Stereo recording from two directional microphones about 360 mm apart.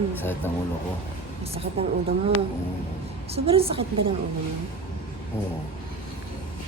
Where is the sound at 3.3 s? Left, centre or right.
Centre.